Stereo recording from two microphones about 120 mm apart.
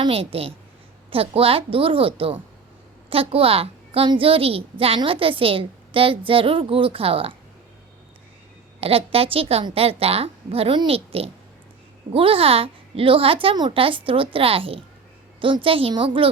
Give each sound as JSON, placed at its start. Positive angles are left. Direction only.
{"t": 0.0, "sound": "a woman's voice", "side_deg": -50}
{"t": 8.8, "sound": "a woman's voice", "side_deg": -55}